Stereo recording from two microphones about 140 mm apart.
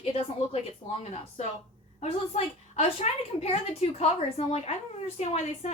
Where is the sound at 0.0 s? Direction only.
40° left (ahead or behind).